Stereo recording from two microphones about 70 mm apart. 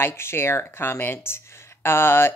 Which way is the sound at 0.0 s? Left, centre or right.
Left.